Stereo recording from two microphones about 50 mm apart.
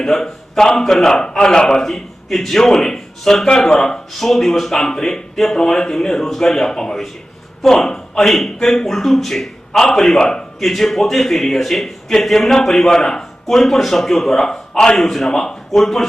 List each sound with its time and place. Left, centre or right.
0.1 s a man's voice: centre
10.6 s a man's voice: centre